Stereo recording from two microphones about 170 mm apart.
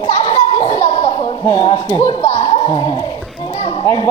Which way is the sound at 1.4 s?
20° left (ahead or behind).